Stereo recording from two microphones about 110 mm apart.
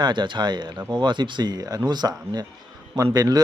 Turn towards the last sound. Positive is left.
turn(degrees=-35)  # may be behind; listen again after turning